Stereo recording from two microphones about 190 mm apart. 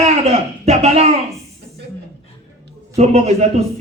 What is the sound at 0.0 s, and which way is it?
Speech, 35° right (ahead or behind).